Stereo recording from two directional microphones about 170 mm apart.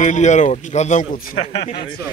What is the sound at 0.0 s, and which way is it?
A man's voice, 45° left (ahead or behind).